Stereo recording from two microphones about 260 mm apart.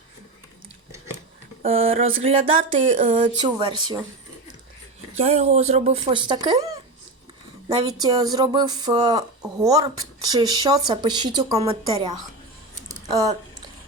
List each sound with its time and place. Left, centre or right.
1.6 s speech: right
3.2 s speech: centre
5.1 s speech: right
8.0 s speech: centre
12.9 s a sound: centre